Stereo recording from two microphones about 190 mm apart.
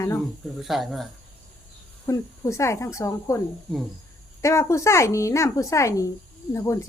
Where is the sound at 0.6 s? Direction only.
Centre (ahead or behind).